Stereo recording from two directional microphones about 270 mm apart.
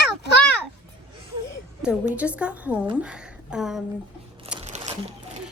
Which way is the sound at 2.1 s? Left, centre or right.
Centre.